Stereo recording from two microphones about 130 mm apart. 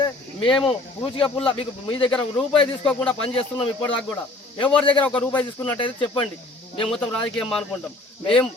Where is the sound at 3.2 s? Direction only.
45° left (ahead or behind).